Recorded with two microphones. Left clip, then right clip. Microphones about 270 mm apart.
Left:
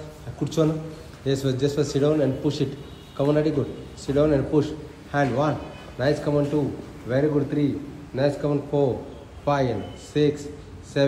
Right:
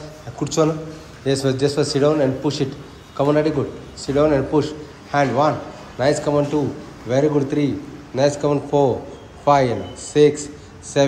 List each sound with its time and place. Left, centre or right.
0.4 s a man's voice: centre